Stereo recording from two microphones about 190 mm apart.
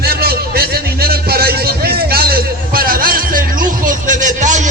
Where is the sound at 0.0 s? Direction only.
55° right (ahead or behind).